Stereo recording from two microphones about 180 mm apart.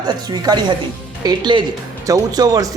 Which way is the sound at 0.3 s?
25° right (ahead or behind).